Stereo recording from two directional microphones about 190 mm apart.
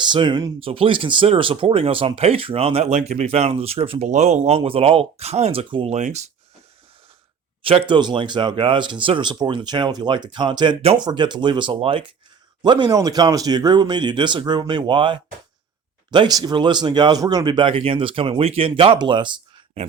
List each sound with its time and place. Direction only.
0.0 s speech: 25° right (ahead or behind)
7.6 s speech: 30° right (ahead or behind)